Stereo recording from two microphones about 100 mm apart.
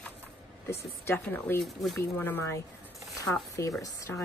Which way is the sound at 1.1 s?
20° left (ahead or behind).